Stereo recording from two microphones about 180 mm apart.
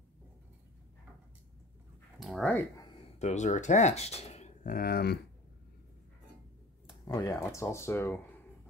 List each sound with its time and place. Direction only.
2.1 s dog: centre (ahead or behind)
3.2 s speech: 40° left (ahead or behind)
4.6 s speech: 55° left (ahead or behind)
7.1 s speech: 20° left (ahead or behind)